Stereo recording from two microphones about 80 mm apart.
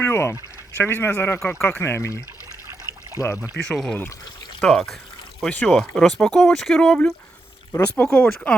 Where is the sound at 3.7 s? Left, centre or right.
Centre.